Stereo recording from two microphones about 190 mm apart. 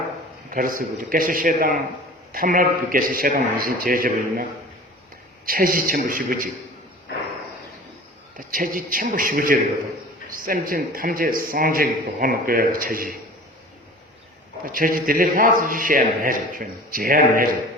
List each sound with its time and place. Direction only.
0.5 s a man's voice: 45° right (ahead or behind)
5.5 s a man's voice: 50° right (ahead or behind)
8.4 s a man's voice: 45° right (ahead or behind)
14.7 s a man's voice: 45° right (ahead or behind)